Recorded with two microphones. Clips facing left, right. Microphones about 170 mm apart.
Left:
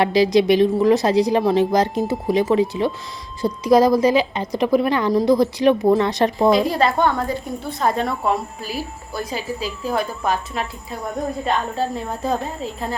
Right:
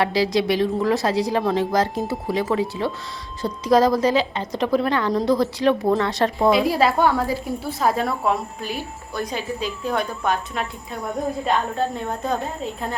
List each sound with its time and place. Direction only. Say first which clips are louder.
0.0 s speech: left 4 dB; 20° left (ahead or behind)
6.5 s a woman's voice: left 1 dB; 5° right (ahead or behind)